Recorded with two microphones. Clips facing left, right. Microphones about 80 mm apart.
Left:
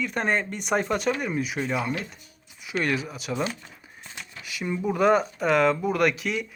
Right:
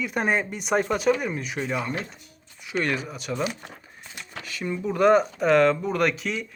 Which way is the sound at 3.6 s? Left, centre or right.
Right.